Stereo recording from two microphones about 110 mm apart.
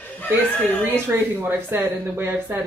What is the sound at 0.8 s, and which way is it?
Speech, 20° right (ahead or behind).